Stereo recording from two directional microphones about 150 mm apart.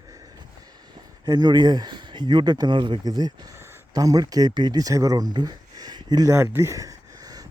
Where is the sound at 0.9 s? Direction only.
25° right (ahead or behind).